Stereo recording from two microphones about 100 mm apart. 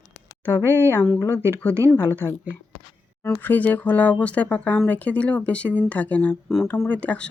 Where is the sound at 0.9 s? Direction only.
25° left (ahead or behind).